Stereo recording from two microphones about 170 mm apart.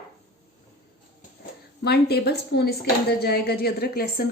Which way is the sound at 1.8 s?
70° left (ahead or behind).